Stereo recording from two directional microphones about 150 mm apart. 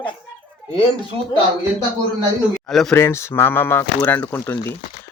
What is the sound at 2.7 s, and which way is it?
Speech, centre (ahead or behind).